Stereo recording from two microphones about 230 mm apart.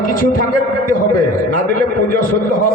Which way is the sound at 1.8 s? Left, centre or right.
Left.